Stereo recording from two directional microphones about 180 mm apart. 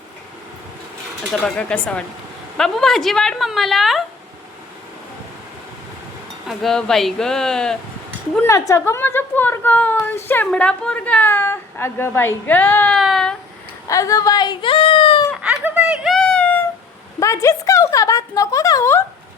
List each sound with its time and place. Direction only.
1.3 s a woman's voice: 5° left (ahead or behind)
6.5 s a woman's voice: centre (ahead or behind)
8.4 s a woman's voice: 15° left (ahead or behind); by 13.3 s centre (ahead or behind)
13.8 s speech: 20° left (ahead or behind)
15.4 s giggle: 10° right (ahead or behind); by 16.6 s 10° left (ahead or behind)
17.2 s a woman's voice: 15° left (ahead or behind)